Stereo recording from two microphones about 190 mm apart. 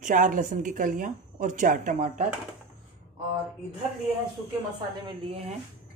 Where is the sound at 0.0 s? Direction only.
45° right (ahead or behind).